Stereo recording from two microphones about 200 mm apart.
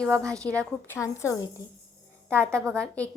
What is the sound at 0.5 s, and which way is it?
Speech, 10° left (ahead or behind).